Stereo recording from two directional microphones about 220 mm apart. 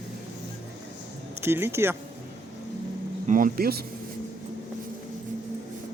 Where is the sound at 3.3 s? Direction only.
40° right (ahead or behind).